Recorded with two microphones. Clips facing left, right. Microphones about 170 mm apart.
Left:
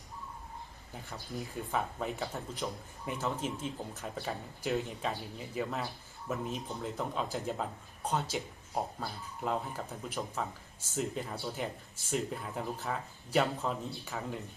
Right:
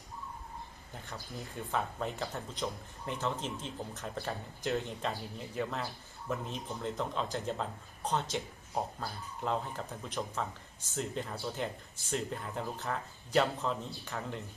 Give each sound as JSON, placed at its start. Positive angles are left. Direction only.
{"t": 1.7, "sound": "speech", "side_deg": 5}